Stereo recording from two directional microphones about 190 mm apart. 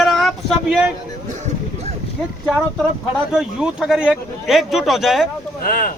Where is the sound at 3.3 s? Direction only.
Centre (ahead or behind).